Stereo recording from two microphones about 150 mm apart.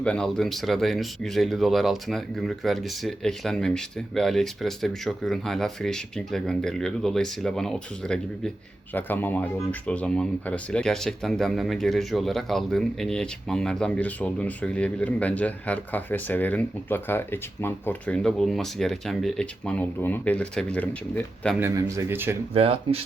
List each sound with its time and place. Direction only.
0.0 s speech: 5° left (ahead or behind)
21.6 s speech: 20° right (ahead or behind)
22.5 s speech: 40° right (ahead or behind)